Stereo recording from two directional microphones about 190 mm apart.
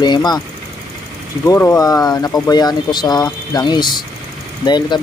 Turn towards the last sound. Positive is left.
turn(degrees=20)  # may be behind; listen again after turning